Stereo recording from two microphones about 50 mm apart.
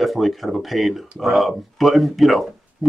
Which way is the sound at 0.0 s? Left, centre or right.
Centre.